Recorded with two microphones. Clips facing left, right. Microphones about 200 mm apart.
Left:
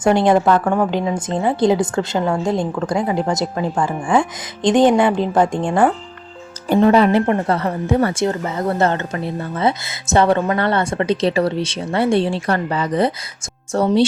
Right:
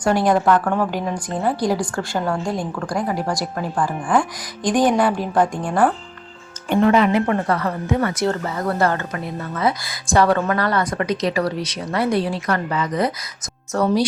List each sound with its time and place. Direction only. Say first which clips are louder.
0.0 s speech: left 3 dB; 25° left (ahead or behind)
0.6 s a woman's voice: left 3 dB; 10° left (ahead or behind)
1.5 s speech: left 5 dB; 25° left (ahead or behind)
3.5 s a woman's voice: left 3 dB; 10° left (ahead or behind)
4.1 s speech: left 3 dB; 25° left (ahead or behind)